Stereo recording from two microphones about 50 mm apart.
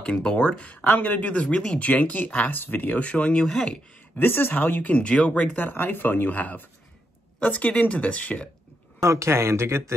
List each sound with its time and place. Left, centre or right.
0.0 s speech: centre
0.8 s speech: left; by 1.8 s centre
1.8 s speech: left
2.5 s speech: left
3.1 s speech: left
3.4 s speech: centre
4.2 s speech: left
4.9 s speech: centre
5.6 s speech: left
9.0 s speech: right